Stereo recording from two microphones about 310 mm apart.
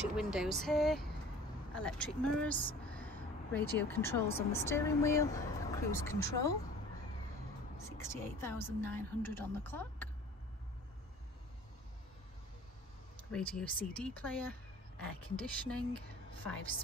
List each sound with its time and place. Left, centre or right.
0.1 s speech: centre
8.0 s speech: centre
13.3 s speech: centre